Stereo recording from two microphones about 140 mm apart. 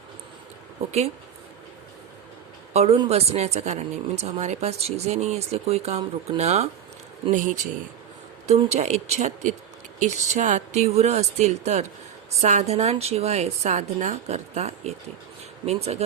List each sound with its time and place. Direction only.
2.7 s speech: 45° right (ahead or behind)
7.3 s speech: 65° right (ahead or behind)
8.4 s speech: 50° right (ahead or behind)